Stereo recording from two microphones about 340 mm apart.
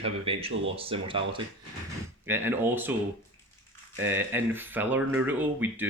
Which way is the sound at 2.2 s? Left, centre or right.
Centre.